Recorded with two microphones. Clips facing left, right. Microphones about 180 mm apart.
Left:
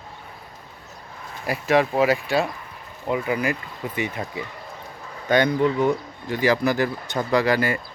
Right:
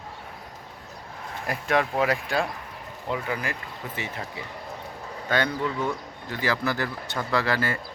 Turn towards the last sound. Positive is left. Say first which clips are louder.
# left 5 dB
turn(degrees=15)  # may be behind; listen again after turning